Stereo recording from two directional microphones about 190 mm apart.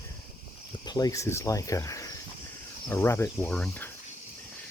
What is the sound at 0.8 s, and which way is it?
Speech, 20° left (ahead or behind).